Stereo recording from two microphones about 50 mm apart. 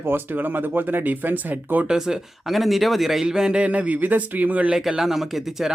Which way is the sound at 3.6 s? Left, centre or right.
Right.